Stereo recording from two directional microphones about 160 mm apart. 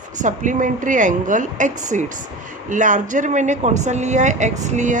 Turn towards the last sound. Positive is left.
turn(degrees=-50)  # may be behind; listen again after turning